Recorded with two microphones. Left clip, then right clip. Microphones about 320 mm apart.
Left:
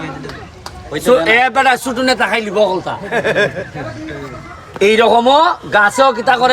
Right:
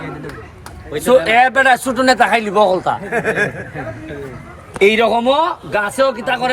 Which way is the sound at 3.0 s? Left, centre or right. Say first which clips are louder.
Left 3 dB; left.